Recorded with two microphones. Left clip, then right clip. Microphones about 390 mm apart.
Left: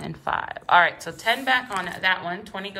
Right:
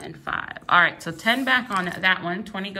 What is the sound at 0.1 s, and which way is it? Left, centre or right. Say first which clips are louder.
A woman's voice: left 2 dB; centre.